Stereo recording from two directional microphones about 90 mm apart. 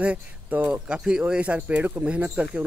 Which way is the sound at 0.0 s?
15° right (ahead or behind).